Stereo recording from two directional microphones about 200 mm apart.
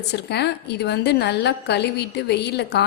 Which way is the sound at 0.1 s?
55° left (ahead or behind).